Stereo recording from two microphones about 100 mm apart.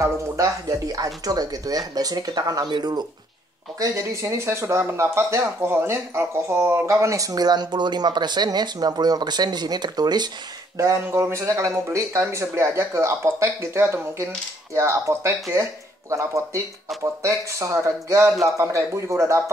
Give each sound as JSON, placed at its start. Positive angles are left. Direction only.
{"t": 0.0, "sound": "speech", "side_deg": -35}
{"t": 3.8, "sound": "speech", "side_deg": -35}
{"t": 10.8, "sound": "speech", "side_deg": -30}